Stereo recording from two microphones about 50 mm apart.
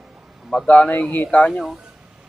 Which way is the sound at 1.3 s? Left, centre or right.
Left.